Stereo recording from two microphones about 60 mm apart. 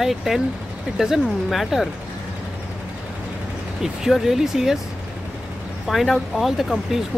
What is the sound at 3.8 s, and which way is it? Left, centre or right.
Speech, centre.